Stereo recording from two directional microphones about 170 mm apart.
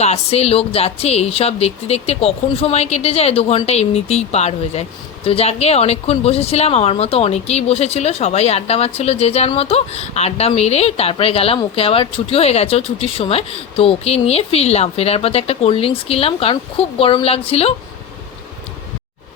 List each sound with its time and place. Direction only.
0.0 s a woman's voice: 40° left (ahead or behind)